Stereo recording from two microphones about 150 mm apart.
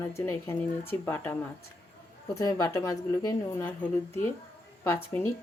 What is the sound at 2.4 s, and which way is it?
Speech, 20° left (ahead or behind).